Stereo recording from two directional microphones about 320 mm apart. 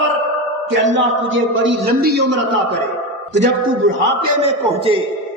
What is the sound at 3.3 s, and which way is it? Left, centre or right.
Speech, right.